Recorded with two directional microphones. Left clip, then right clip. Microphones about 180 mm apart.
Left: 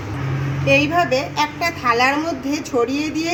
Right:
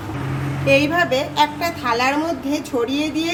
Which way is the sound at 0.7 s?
Centre (ahead or behind).